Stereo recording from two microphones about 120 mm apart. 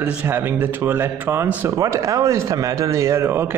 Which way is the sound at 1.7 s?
25° right (ahead or behind).